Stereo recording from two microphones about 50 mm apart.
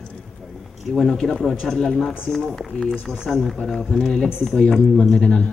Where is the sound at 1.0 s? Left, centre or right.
Centre.